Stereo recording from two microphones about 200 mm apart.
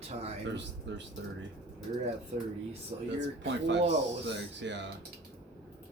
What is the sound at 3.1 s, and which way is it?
Speech, 60° right (ahead or behind).